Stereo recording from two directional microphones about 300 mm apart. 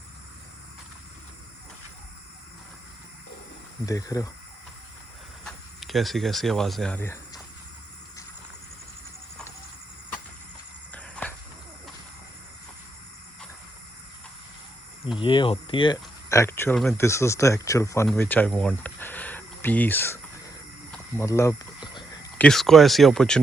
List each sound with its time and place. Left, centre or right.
3.8 s speech: centre
5.5 s speech: centre
10.9 s a sound: centre
15.2 s speech: centre
21.2 s speech: centre